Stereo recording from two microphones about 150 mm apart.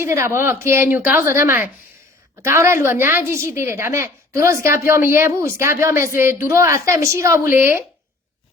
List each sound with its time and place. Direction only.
0.0 s a woman's voice: 20° right (ahead or behind)